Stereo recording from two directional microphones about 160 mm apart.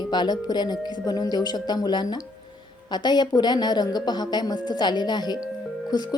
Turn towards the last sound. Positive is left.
turn(degrees=25)  # may be behind; listen again after turning